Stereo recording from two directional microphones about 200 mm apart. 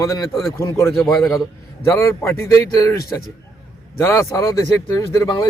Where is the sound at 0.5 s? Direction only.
15° left (ahead or behind).